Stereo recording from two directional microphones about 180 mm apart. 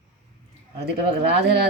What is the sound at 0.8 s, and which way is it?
Speech, 65° right (ahead or behind).